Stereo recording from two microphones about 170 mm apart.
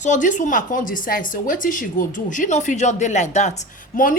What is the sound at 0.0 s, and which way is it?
Speech, 45° left (ahead or behind).